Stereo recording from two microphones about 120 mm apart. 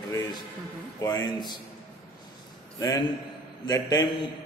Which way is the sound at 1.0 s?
35° left (ahead or behind).